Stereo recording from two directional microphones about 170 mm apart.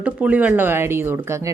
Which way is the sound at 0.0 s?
10° right (ahead or behind).